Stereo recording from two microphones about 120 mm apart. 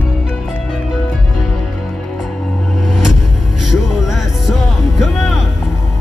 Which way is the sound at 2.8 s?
5° right (ahead or behind).